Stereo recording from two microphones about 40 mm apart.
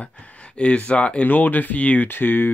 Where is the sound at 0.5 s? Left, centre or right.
Left.